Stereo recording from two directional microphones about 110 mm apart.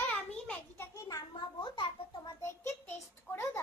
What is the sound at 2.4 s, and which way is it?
A child's voice, 25° left (ahead or behind).